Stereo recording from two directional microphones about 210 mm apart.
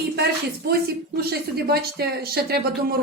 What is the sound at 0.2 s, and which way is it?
Speech, 45° right (ahead or behind).